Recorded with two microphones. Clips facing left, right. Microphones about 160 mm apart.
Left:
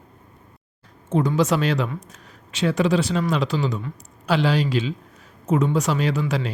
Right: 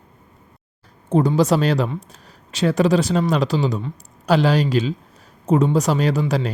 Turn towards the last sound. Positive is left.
turn(degrees=-40)  # may be behind; listen again after turning